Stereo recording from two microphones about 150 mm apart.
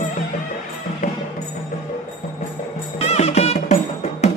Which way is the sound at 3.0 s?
45° left (ahead or behind).